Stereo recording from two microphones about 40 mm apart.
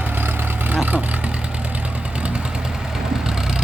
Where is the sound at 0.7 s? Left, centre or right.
Right.